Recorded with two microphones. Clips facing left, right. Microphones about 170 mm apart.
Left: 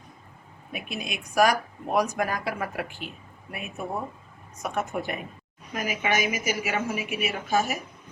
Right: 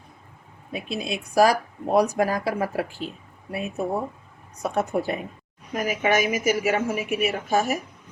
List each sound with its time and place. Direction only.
0.7 s a woman's voice: 30° right (ahead or behind)